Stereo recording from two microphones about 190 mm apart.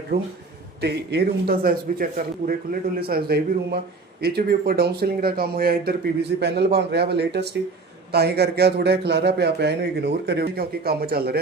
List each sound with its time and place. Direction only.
0.1 s speech: 55° right (ahead or behind)